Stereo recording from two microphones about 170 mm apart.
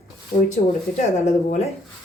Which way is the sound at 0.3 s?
45° left (ahead or behind).